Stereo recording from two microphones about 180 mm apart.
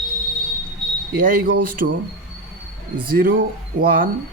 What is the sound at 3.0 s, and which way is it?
A man's voice, 50° right (ahead or behind).